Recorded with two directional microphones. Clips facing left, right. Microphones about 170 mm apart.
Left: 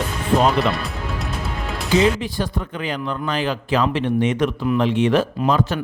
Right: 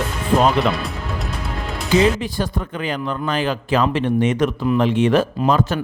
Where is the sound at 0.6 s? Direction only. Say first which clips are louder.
Right 1 dB; centre (ahead or behind).